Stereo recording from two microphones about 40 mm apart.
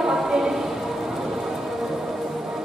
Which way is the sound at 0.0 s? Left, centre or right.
Centre.